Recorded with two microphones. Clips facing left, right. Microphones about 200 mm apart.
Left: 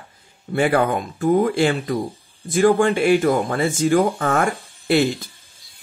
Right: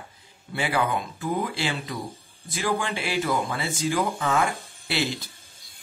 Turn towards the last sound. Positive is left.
turn(degrees=50)  # may be behind; listen again after turning